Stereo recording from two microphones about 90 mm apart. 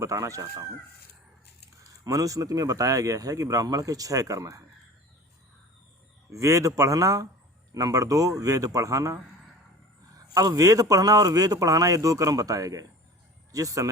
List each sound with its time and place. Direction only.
0.0 s a man's voice: 35° right (ahead or behind)
2.0 s a man's voice: 40° right (ahead or behind)
6.3 s a man's voice: 35° right (ahead or behind)